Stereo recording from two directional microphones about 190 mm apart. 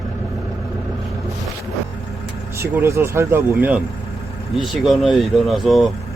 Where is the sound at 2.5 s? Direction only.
15° right (ahead or behind).